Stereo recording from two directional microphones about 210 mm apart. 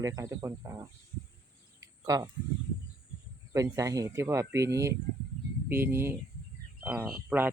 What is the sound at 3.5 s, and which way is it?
Speech, 15° right (ahead or behind).